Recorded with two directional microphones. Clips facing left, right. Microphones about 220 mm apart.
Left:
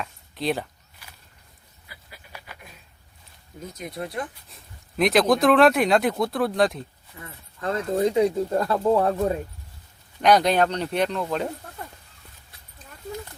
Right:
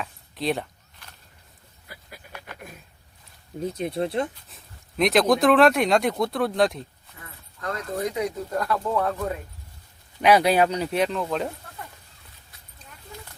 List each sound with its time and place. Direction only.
0.0 s a sound: centre (ahead or behind)
3.8 s speech: 30° right (ahead or behind)
4.4 s speech: centre (ahead or behind)
7.9 s speech: 25° left (ahead or behind)
10.2 s speech: 5° right (ahead or behind)